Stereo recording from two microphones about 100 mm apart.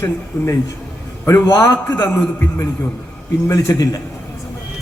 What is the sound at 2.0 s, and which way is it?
A man's voice, 25° left (ahead or behind).